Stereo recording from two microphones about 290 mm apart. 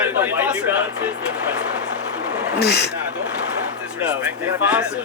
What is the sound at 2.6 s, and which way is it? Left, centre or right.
Speech, left.